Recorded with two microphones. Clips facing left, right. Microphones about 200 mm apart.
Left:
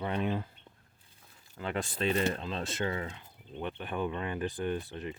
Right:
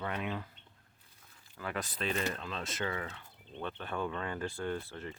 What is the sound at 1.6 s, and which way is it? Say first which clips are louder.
Speech: left 5 dB; 25° left (ahead or behind).